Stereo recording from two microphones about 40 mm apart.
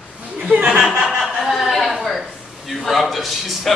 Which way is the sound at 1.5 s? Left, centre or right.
Centre.